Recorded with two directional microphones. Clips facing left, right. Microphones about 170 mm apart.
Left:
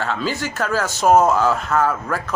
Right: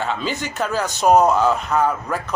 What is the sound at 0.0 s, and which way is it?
A man's voice, 15° right (ahead or behind).